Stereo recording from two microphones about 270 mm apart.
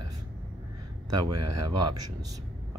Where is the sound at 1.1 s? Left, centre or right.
Right.